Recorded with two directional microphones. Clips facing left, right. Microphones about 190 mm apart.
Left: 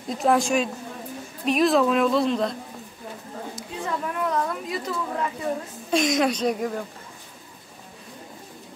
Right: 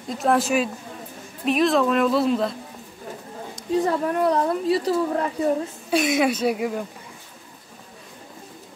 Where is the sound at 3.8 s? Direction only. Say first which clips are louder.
Right 5 dB; 35° right (ahead or behind).